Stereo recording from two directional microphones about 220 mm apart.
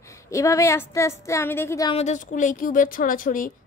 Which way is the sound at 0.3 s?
15° left (ahead or behind).